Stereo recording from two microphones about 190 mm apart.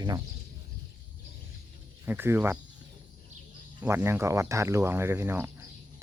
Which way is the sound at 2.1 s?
10° right (ahead or behind).